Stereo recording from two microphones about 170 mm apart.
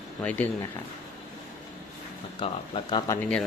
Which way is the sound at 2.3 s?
30° left (ahead or behind).